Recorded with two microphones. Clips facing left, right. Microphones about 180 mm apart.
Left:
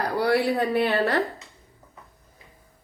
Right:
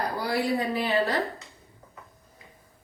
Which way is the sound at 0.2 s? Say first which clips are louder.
Left 6 dB; 65° left (ahead or behind).